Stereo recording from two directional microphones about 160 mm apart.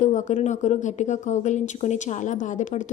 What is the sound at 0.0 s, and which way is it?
A woman's voice, 50° left (ahead or behind).